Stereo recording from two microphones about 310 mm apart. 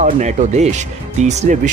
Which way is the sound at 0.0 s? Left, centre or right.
Right.